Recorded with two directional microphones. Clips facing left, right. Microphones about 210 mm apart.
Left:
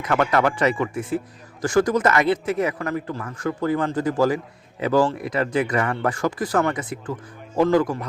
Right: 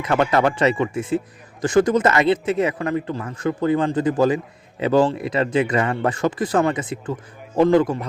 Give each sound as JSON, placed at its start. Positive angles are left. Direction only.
{"t": 0.0, "sound": "speech", "side_deg": -25}